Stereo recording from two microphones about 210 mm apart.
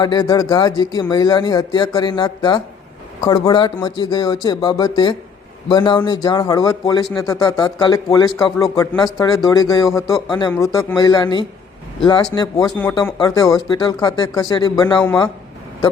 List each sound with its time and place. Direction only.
0.0 s speech: 20° left (ahead or behind)